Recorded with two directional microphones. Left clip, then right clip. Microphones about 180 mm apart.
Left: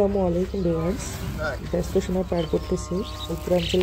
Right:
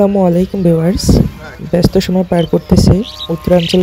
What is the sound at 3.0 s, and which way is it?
Speech, 55° left (ahead or behind).